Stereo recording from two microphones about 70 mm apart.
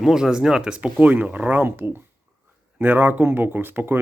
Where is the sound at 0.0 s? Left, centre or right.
Centre.